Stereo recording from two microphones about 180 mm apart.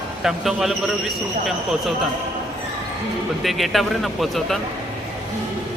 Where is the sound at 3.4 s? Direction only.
Centre (ahead or behind).